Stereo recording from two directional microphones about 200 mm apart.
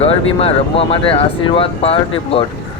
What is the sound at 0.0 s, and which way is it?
Speech, 30° left (ahead or behind).